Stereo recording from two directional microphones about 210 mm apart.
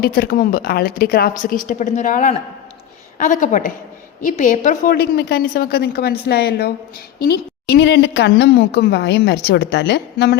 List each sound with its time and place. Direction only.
0.0 s a woman's voice: 45° left (ahead or behind)